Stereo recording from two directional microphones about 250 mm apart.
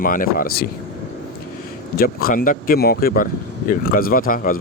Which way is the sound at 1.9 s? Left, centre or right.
Left.